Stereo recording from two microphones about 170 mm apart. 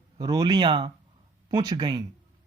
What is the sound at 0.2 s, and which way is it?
Speech, 25° right (ahead or behind).